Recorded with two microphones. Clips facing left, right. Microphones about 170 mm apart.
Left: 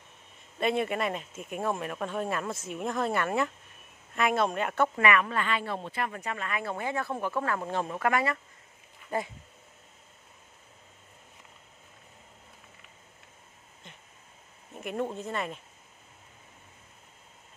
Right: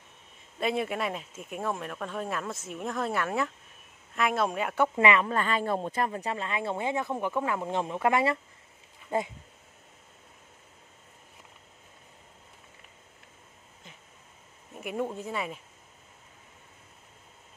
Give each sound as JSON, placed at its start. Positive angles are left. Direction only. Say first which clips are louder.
{"t": 0.6, "sound": "speech", "louder": "left 1 dB", "side_deg": 0}
{"t": 4.9, "sound": "speech", "louder": "right 3 dB", "side_deg": -25}
{"t": 5.3, "sound": "speech", "louder": "right 3 dB", "side_deg": -40}
{"t": 6.1, "sound": "speech", "louder": "right 2 dB", "side_deg": -25}
{"t": 14.8, "sound": "speech", "louder": "even", "side_deg": -5}